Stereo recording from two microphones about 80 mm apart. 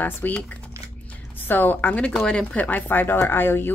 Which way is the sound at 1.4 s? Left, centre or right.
Left.